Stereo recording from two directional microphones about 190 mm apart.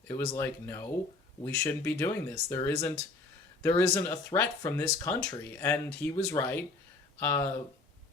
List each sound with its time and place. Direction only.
0.2 s speech: 15° left (ahead or behind)